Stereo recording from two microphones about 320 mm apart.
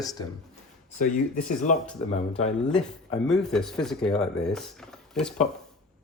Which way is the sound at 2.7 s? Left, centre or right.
Centre.